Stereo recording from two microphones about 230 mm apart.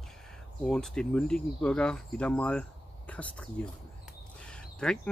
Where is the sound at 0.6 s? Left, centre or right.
Centre.